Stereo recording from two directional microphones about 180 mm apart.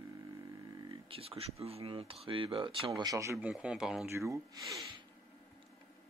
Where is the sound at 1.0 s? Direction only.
30° right (ahead or behind).